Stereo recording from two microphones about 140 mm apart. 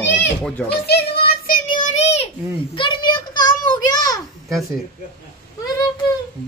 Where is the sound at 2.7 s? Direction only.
35° left (ahead or behind).